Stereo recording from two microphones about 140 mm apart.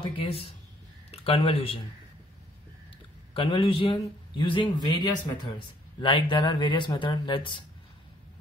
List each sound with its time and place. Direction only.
0.0 s speech: 40° left (ahead or behind)
3.3 s a man's voice: 40° left (ahead or behind)